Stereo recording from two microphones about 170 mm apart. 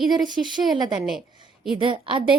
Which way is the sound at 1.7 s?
30° right (ahead or behind).